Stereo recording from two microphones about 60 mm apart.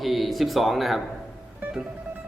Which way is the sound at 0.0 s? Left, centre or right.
Centre.